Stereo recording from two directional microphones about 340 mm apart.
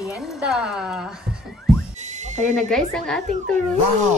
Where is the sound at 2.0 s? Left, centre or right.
Right.